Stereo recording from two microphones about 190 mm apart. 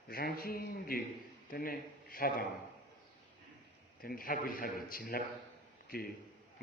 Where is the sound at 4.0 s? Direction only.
50° left (ahead or behind).